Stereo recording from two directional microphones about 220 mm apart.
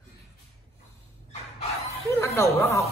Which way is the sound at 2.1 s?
15° left (ahead or behind).